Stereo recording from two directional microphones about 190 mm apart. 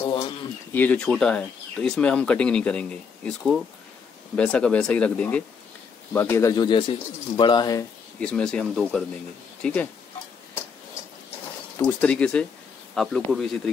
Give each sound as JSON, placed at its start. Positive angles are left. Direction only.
{"t": 0.0, "sound": "a sound", "side_deg": 25}
{"t": 0.7, "sound": "speech", "side_deg": 10}
{"t": 8.2, "sound": "speech", "side_deg": 5}
{"t": 11.8, "sound": "speech", "side_deg": 5}